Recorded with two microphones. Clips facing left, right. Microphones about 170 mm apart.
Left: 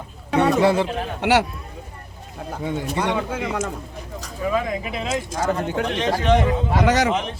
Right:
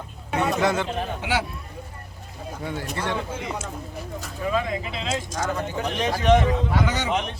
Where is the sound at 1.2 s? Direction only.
75° left (ahead or behind).